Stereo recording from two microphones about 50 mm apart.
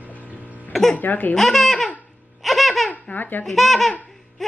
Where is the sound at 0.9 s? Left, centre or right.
Left.